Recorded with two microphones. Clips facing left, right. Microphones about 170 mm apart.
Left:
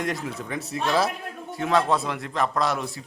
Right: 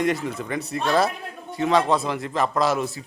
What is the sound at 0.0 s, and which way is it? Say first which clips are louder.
A man's voice: right 5 dB; centre (ahead or behind).